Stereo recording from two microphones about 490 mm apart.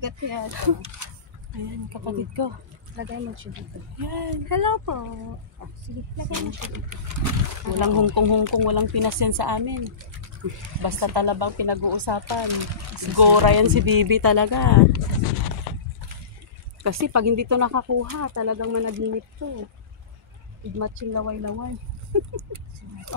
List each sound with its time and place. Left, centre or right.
0.0 s speech: right
1.9 s speech: right
3.0 s speech: right
3.5 s speech: right
6.1 s speech: right
10.8 s speech: right
16.8 s speech: right
20.7 s speech: right